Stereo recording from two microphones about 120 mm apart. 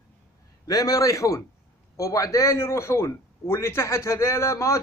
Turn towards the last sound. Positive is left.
turn(degrees=25)  # may be behind; listen again after turning